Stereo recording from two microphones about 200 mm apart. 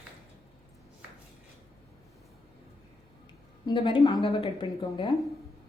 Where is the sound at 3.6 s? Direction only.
25° left (ahead or behind).